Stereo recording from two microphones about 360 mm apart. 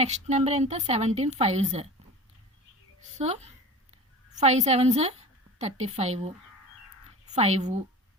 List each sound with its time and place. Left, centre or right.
0.0 s a woman's voice: centre
3.2 s a woman's voice: centre